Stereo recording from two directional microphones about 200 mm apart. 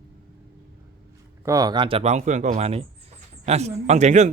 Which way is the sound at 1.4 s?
15° right (ahead or behind).